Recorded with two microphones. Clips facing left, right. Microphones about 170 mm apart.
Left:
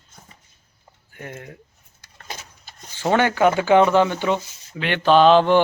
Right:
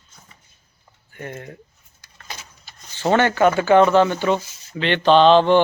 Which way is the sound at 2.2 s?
45° left (ahead or behind).